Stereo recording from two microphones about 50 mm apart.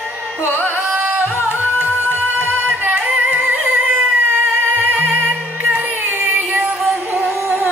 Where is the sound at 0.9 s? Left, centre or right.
Right.